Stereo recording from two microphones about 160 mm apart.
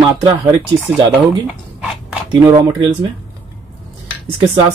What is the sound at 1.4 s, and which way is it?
Zipper, 5° right (ahead or behind).